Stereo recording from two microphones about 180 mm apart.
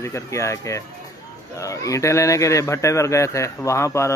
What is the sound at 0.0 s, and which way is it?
A man's voice, 15° left (ahead or behind).